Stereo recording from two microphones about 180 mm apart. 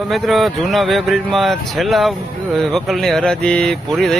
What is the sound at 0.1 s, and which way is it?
Speech, centre (ahead or behind).